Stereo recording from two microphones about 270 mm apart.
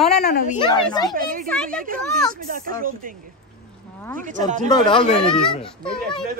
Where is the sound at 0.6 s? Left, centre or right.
Centre.